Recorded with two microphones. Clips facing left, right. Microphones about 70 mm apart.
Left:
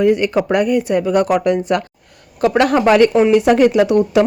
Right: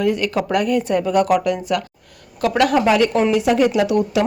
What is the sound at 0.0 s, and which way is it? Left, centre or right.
A woman's voice, left.